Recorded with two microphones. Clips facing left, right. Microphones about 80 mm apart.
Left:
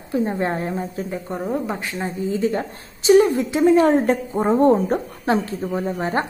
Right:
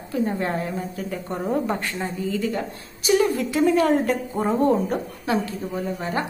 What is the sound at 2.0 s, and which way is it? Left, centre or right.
A woman's voice, left.